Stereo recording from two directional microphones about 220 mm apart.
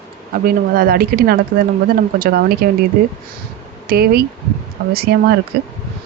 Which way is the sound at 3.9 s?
45° right (ahead or behind).